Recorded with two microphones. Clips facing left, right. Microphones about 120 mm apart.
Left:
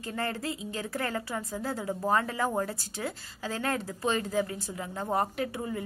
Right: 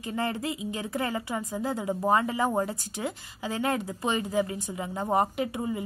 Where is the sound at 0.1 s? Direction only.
20° right (ahead or behind).